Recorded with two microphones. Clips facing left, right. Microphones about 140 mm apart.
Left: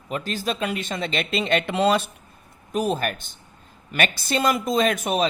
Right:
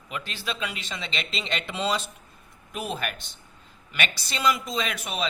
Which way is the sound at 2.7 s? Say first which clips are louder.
Left 8 dB; 40° left (ahead or behind).